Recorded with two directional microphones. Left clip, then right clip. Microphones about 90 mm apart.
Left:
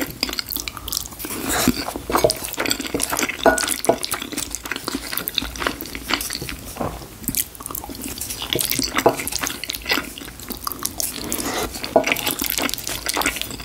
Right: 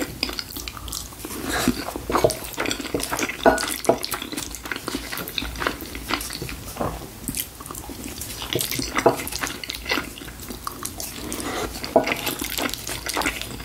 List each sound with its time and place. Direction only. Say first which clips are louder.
0.0 s a sound: left 3 dB; 35° left (ahead or behind)
8.4 s drip: left 4 dB; 35° left (ahead or behind)
12.0 s water: left 6 dB; 35° left (ahead or behind)